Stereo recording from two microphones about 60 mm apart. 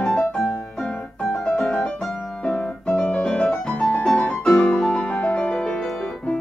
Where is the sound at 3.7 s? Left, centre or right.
Centre.